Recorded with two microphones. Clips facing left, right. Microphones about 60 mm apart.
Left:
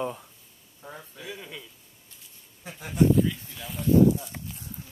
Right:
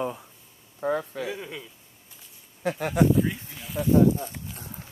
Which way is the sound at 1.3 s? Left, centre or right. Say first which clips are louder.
Right 4 dB; centre.